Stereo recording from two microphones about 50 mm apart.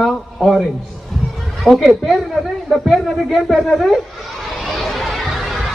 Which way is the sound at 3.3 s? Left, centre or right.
Centre.